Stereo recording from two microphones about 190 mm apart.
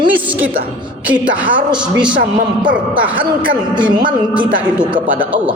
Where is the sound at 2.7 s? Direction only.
10° right (ahead or behind).